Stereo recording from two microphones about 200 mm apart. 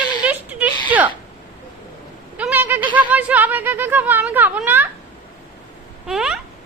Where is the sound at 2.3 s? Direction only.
10° right (ahead or behind).